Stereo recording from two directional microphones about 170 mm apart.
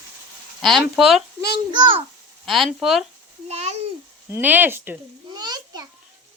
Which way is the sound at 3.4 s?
40° right (ahead or behind).